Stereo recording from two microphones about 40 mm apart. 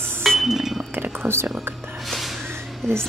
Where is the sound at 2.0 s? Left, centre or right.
Centre.